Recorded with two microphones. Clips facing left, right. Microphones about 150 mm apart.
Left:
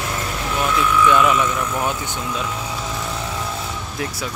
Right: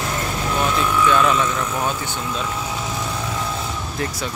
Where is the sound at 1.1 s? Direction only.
10° left (ahead or behind).